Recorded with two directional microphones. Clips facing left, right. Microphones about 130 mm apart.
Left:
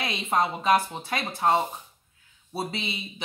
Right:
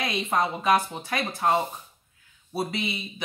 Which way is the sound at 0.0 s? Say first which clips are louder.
Even; 25° left (ahead or behind).